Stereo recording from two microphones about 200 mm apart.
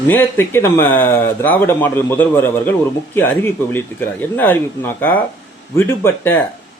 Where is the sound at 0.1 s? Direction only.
10° left (ahead or behind).